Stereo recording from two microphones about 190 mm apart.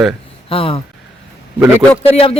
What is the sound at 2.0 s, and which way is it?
Speech, 30° left (ahead or behind).